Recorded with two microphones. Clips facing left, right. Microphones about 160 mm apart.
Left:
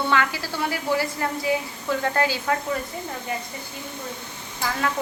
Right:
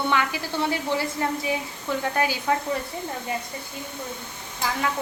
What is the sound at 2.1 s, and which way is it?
Speech, 15° right (ahead or behind).